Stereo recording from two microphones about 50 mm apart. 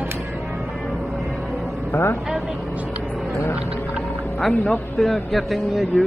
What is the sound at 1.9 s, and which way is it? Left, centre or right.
Speech, left.